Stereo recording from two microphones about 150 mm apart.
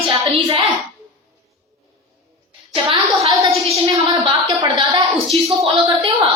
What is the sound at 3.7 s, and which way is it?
A woman's voice, 35° right (ahead or behind).